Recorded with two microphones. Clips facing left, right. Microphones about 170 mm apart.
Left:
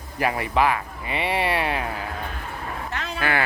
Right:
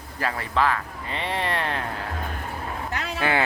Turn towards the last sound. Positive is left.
turn(degrees=-20)  # may be behind; listen again after turning